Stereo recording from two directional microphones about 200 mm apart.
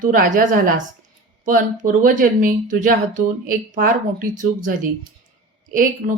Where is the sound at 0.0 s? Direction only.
40° right (ahead or behind).